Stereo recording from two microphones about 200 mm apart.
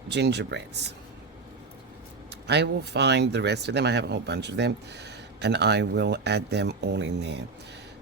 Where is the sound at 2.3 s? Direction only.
55° right (ahead or behind).